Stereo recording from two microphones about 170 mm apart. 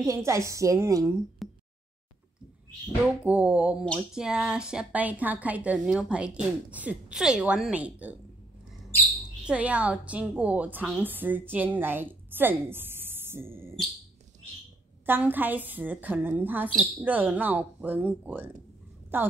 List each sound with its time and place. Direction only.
0.0 s a woman's voice: 15° right (ahead or behind)
1.4 s a sound: centre (ahead or behind)
3.3 s a woman's voice: 10° right (ahead or behind)
9.2 s a woman's voice: 5° right (ahead or behind)
15.0 s a woman's voice: 10° right (ahead or behind)